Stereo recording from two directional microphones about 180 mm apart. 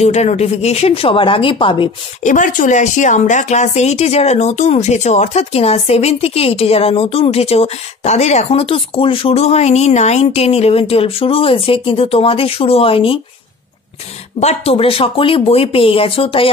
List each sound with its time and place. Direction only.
0.0 s speech: 40° left (ahead or behind)
2.2 s speech: 45° left (ahead or behind)
14.4 s speech: 35° left (ahead or behind)